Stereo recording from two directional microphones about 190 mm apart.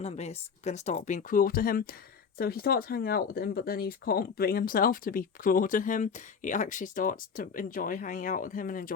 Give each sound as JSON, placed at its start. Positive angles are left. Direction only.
{"t": 0.0, "sound": "speech", "side_deg": 35}